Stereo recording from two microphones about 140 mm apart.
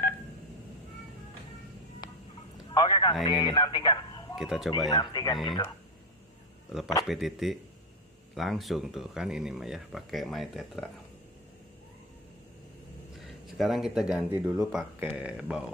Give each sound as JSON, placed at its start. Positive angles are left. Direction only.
{"t": 2.7, "sound": "a sound", "side_deg": 30}
{"t": 3.3, "sound": "speech", "side_deg": 30}
{"t": 4.4, "sound": "speech", "side_deg": 0}
{"t": 4.6, "sound": "speech", "side_deg": 30}
{"t": 7.1, "sound": "speech", "side_deg": 0}
{"t": 13.2, "sound": "speech", "side_deg": 0}